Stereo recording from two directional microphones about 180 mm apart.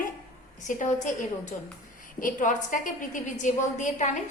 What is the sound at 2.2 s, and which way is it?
A woman's voice, 45° left (ahead or behind).